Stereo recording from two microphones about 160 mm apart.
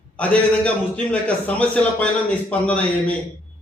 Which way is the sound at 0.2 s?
10° left (ahead or behind).